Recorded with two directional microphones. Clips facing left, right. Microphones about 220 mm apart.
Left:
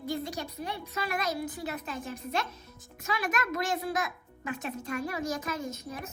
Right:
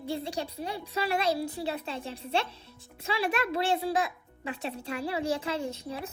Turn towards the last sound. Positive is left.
turn(degrees=-30)  # may be behind; listen again after turning